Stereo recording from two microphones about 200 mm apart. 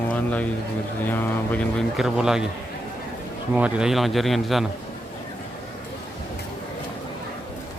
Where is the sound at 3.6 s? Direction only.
5° right (ahead or behind).